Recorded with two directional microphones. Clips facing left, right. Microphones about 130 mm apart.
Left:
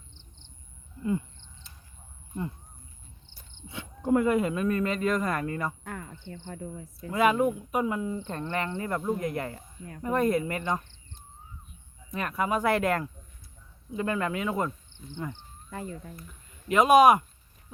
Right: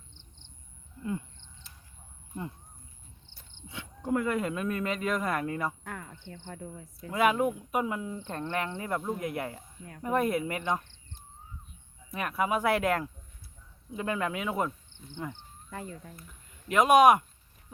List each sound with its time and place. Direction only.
1.0 s a sound: 10° left (ahead or behind)
3.7 s cricket: 30° left (ahead or behind)
4.4 s speech: centre (ahead or behind)
12.1 s speech: 5° right (ahead or behind)